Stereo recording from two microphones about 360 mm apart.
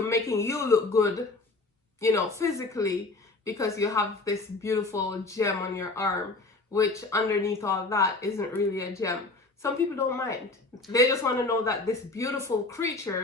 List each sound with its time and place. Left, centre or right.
0.1 s a woman's voice: centre